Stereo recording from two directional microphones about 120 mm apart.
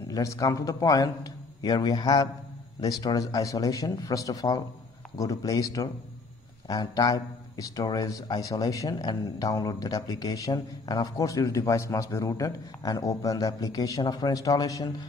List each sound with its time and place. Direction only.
0.1 s a man's voice: 30° left (ahead or behind)